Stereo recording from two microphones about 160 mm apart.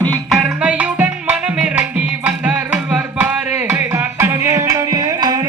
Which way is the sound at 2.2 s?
10° right (ahead or behind).